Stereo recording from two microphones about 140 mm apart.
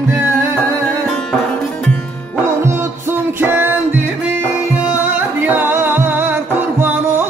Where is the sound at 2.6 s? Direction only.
15° right (ahead or behind).